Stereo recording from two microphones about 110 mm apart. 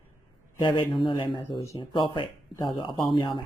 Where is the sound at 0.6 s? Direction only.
50° left (ahead or behind).